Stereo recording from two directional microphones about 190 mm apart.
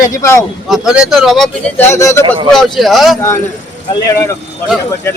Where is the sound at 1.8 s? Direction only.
15° left (ahead or behind).